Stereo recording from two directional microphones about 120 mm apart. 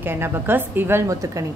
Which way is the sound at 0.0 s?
20° right (ahead or behind).